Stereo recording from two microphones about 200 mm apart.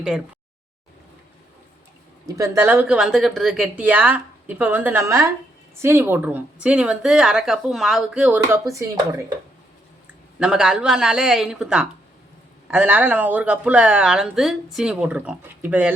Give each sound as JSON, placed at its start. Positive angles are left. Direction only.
{"t": 2.2, "sound": "speech", "side_deg": -15}
{"t": 10.4, "sound": "speech", "side_deg": -5}